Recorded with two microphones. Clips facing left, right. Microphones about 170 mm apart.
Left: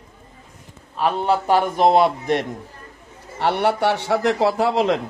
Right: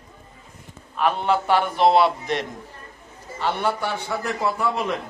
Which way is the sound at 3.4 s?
70° left (ahead or behind).